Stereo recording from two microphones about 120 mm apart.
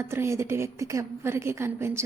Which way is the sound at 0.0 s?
20° right (ahead or behind).